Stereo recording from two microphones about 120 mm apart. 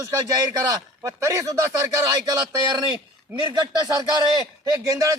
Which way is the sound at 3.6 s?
30° right (ahead or behind).